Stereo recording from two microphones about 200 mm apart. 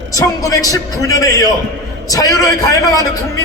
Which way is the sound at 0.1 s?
15° left (ahead or behind).